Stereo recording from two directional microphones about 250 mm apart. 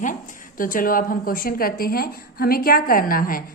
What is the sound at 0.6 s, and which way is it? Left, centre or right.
A woman's voice, left.